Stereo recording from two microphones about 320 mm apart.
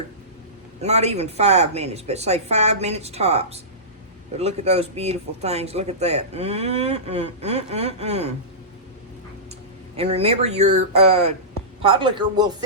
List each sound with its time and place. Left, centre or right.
0.8 s speech: centre
9.9 s speech: centre